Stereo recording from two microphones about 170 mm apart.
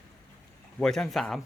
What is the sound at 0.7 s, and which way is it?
Speech, 5° left (ahead or behind).